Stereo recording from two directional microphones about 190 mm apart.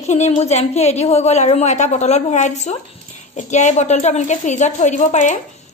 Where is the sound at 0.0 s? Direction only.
35° left (ahead or behind).